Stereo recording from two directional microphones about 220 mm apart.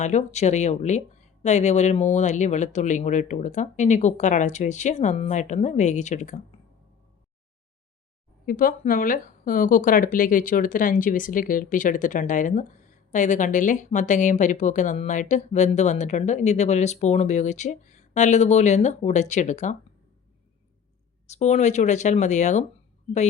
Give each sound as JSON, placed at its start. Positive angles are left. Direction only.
{"t": 0.0, "sound": "speech", "side_deg": 30}
{"t": 8.4, "sound": "speech", "side_deg": 40}
{"t": 21.2, "sound": "speech", "side_deg": 30}